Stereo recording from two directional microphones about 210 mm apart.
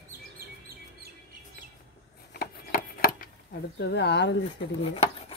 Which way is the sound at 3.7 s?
55° left (ahead or behind).